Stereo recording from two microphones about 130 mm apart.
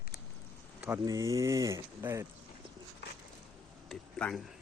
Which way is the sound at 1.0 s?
25° right (ahead or behind).